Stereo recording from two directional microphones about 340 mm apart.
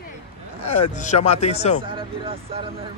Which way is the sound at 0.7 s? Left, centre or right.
Centre.